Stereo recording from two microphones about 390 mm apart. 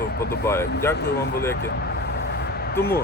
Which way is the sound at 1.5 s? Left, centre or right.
Left.